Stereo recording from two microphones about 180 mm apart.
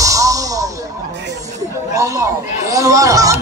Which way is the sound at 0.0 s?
20° right (ahead or behind).